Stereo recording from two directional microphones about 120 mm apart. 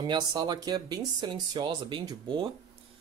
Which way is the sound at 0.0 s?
40° right (ahead or behind).